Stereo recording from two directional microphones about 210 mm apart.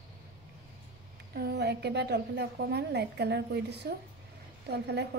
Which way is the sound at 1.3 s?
50° right (ahead or behind).